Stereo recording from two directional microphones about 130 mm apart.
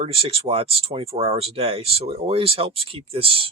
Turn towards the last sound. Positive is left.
turn(degrees=-45)  # may be behind; listen again after turning